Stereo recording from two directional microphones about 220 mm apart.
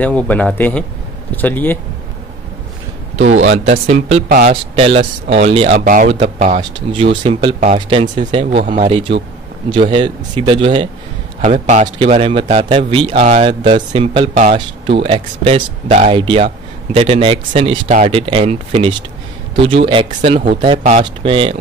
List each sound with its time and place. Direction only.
0.0 s a man's voice: 5° left (ahead or behind)
3.2 s speech: 55° right (ahead or behind)
3.8 s a man's voice: 30° right (ahead or behind)
4.3 s speech: 40° right (ahead or behind)
4.7 s a man's voice: 25° right (ahead or behind)
6.9 s a man's voice: 25° right (ahead or behind)
11.4 s a man's voice: 35° right (ahead or behind)